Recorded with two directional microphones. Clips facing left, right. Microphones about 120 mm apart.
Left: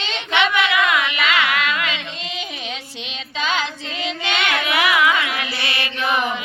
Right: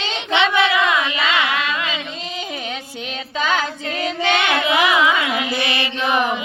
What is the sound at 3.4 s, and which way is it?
Child singing, 45° right (ahead or behind).